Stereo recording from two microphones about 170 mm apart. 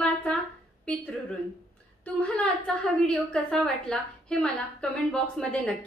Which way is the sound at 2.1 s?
5° left (ahead or behind).